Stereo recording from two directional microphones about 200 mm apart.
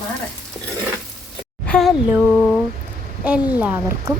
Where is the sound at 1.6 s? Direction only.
5° left (ahead or behind).